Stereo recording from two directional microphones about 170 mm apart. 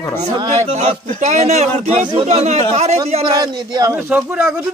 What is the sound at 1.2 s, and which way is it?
A man's voice, 40° right (ahead or behind).